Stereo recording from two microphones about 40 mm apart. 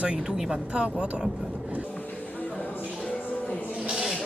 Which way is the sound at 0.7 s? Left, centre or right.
Right.